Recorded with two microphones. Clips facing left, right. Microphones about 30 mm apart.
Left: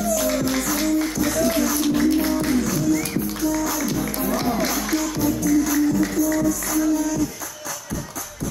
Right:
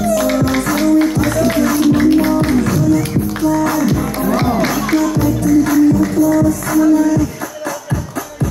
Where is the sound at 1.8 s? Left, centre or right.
Right.